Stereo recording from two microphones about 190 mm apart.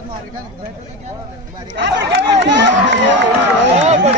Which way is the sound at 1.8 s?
70° right (ahead or behind).